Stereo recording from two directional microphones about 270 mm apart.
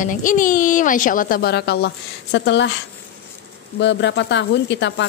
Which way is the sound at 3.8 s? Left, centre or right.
Left.